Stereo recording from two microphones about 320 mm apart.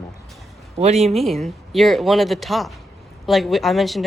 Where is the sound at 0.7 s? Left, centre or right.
Centre.